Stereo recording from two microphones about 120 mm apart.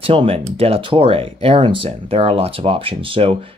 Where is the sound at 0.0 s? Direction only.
50° right (ahead or behind).